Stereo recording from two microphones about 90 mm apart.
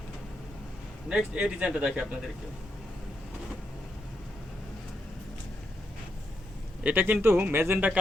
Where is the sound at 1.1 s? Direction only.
10° right (ahead or behind).